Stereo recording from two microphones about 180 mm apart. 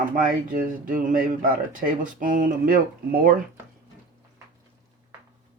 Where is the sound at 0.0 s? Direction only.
50° right (ahead or behind).